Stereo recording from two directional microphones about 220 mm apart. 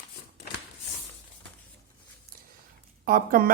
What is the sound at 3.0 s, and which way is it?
Speech, 40° right (ahead or behind).